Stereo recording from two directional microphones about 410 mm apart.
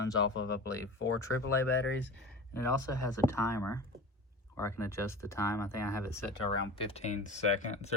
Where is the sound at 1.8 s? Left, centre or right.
Left.